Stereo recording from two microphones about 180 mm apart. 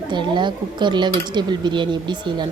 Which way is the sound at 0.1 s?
25° right (ahead or behind).